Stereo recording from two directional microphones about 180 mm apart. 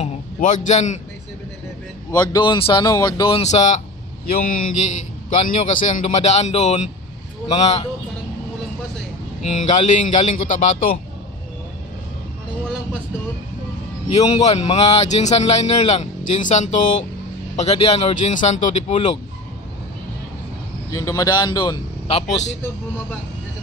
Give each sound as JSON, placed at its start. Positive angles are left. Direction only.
{"t": 0.0, "sound": "a sound", "side_deg": 40}
{"t": 2.0, "sound": "speech", "side_deg": 20}
{"t": 4.3, "sound": "a man's voice", "side_deg": 50}
{"t": 9.4, "sound": "a man's voice", "side_deg": 40}
{"t": 14.1, "sound": "a man's voice", "side_deg": 35}
{"t": 20.9, "sound": "speech", "side_deg": 20}